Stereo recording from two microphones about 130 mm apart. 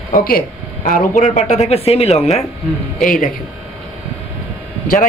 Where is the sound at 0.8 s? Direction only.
85° left; by 2.4 s 55° left (ahead or behind).